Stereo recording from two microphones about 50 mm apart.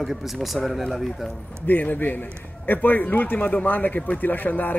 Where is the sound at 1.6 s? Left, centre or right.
Left.